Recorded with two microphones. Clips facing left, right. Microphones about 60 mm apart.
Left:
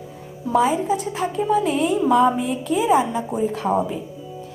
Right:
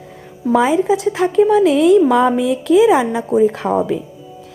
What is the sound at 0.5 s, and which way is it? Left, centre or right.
A woman's voice, right.